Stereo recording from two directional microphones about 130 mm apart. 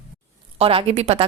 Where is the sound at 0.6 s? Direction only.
45° right (ahead or behind).